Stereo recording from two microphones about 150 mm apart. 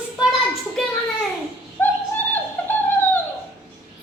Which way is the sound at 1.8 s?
10° left (ahead or behind).